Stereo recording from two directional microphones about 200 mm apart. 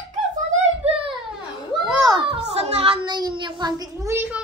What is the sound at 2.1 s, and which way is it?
Child singing, 30° right (ahead or behind).